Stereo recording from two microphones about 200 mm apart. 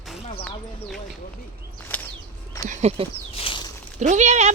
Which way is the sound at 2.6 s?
35° right (ahead or behind).